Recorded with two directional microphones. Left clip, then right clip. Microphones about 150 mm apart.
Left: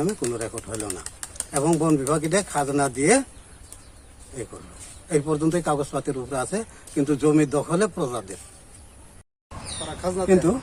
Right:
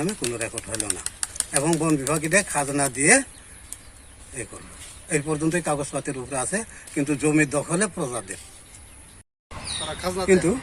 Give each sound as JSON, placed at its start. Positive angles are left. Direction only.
{"t": 0.0, "sound": "speech", "side_deg": 5}
{"t": 0.3, "sound": "speech", "side_deg": 15}
{"t": 0.8, "sound": "typing", "side_deg": 25}
{"t": 1.5, "sound": "speech", "side_deg": 15}
{"t": 5.0, "sound": "speech", "side_deg": 10}
{"t": 6.1, "sound": "speech", "side_deg": 0}
{"t": 6.3, "sound": "speech", "side_deg": 15}
{"t": 10.0, "sound": "speech", "side_deg": 45}
{"t": 10.2, "sound": "speech", "side_deg": 15}